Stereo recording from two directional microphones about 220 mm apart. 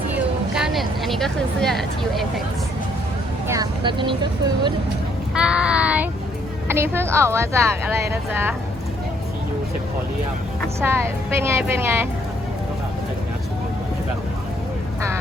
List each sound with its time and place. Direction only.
0.5 s speech: centre (ahead or behind)
3.4 s speech: 15° right (ahead or behind)
5.3 s child singing: 5° right (ahead or behind)
6.7 s a woman's voice: 10° right (ahead or behind)
10.8 s a woman's voice: 10° right (ahead or behind)